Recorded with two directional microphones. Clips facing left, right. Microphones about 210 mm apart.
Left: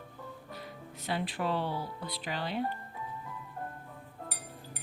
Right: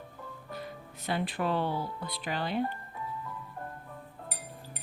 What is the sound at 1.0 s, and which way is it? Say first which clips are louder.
Speech: right 2 dB; 50° right (ahead or behind).